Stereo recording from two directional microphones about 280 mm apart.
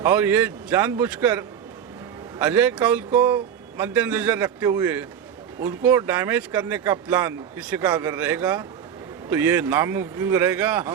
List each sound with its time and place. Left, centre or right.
0.0 s speech: centre